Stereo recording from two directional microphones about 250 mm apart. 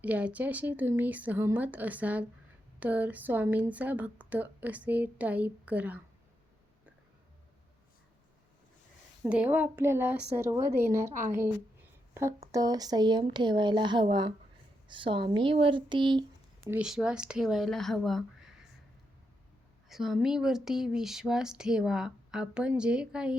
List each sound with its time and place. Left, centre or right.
0.0 s speech: centre
9.2 s speech: centre
12.5 s speech: centre
16.6 s speech: centre
19.9 s speech: centre